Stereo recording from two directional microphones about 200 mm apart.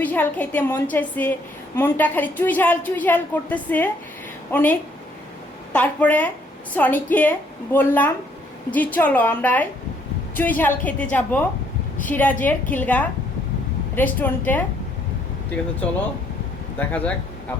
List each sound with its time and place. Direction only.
0.0 s a woman's voice: 10° left (ahead or behind)
16.7 s a woman's voice: 5° left (ahead or behind)